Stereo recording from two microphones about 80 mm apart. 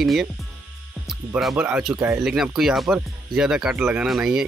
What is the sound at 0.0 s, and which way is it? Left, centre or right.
Speech, centre.